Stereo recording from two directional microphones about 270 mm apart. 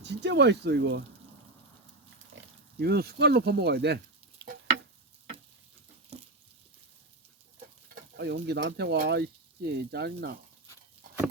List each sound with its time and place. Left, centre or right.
0.0 s speech: right
2.3 s pig: right
6.1 s a sound: right
8.1 s speech: right